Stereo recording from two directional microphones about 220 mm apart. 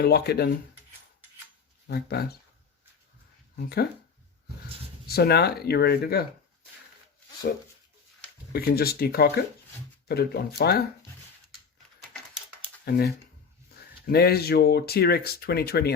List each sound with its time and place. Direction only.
0.0 s speech: 45° left (ahead or behind)
1.9 s speech: 45° left (ahead or behind)
5.0 s speech: 45° left (ahead or behind)
8.5 s speech: 45° left (ahead or behind)
12.9 s speech: 45° left (ahead or behind)
13.7 s a sound: 45° left (ahead or behind)
14.1 s speech: 45° left (ahead or behind)